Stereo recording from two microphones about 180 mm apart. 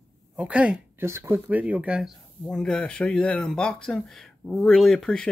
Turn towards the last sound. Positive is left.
turn(degrees=5)  # may be behind; listen again after turning